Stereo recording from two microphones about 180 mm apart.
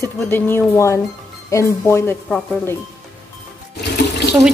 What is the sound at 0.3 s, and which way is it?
A woman's voice, 10° left (ahead or behind).